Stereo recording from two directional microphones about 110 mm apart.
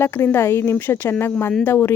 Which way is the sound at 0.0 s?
20° left (ahead or behind).